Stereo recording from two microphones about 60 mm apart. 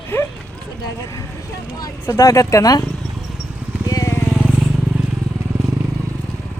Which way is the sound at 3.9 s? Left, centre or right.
Left.